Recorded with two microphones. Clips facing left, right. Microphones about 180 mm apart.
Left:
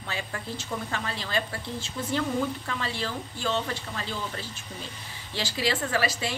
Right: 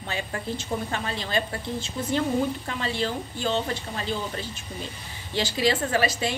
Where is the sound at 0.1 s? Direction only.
25° right (ahead or behind).